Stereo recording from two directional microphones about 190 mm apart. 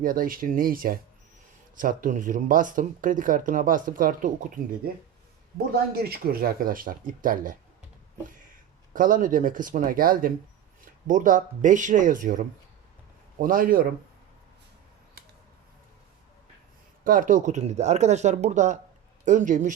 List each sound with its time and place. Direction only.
0.0 s speech: 45° right (ahead or behind)
5.9 s speech: 55° right (ahead or behind)
8.9 s speech: 45° right (ahead or behind)
17.0 s speech: 45° right (ahead or behind)